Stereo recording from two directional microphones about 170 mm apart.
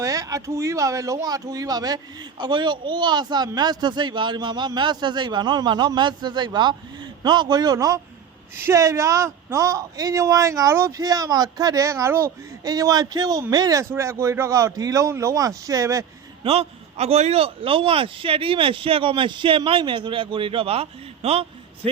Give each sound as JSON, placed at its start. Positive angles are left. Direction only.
{"t": 0.0, "sound": "speech", "side_deg": -20}
{"t": 16.4, "sound": "a man's voice", "side_deg": -35}